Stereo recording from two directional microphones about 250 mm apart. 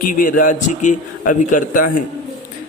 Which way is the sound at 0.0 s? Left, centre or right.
Left.